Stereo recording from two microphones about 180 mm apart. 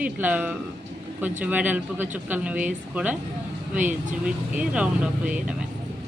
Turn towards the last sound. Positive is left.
turn(degrees=-5)  # may be behind; listen again after turning